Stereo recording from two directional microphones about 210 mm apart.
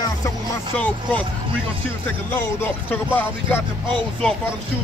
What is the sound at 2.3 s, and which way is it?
Music, 10° left (ahead or behind).